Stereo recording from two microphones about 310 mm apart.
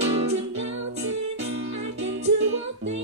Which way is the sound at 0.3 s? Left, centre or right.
Right.